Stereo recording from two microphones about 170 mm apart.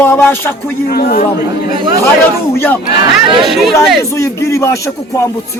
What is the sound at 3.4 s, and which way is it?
Speech, centre (ahead or behind).